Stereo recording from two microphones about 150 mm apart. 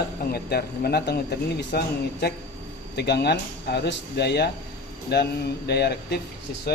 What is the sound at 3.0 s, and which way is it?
Speech, 90° left.